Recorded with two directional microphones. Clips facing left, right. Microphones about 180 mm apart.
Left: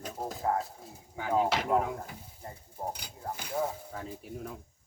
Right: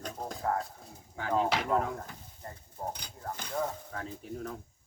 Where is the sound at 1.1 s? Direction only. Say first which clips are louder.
Left 1 dB; 10° left (ahead or behind).